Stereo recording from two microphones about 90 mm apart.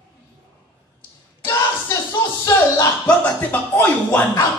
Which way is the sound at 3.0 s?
20° left (ahead or behind).